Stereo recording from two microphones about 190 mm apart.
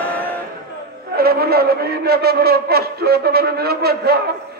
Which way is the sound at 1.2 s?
55° right (ahead or behind).